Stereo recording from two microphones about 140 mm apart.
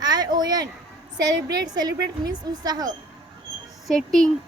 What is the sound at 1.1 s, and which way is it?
A woman's voice, 30° right (ahead or behind).